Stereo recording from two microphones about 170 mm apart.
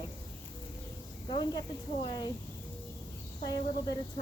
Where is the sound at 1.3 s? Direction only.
30° left (ahead or behind).